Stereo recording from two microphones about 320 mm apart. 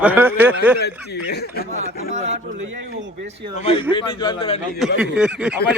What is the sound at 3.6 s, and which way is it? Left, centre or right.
A man's voice, centre.